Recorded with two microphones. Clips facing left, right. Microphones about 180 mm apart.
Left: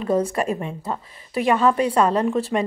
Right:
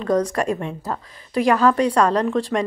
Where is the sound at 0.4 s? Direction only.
5° left (ahead or behind).